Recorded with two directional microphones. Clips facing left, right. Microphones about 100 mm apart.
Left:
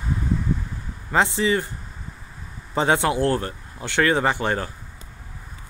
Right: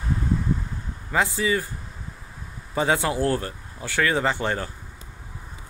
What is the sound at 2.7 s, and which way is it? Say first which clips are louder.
Speech: left 3 dB; 20° left (ahead or behind).